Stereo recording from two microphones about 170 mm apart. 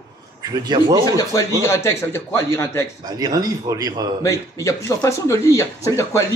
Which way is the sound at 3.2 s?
20° right (ahead or behind).